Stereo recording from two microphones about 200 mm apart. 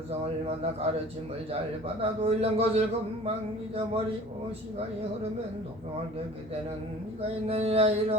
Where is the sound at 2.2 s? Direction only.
30° right (ahead or behind).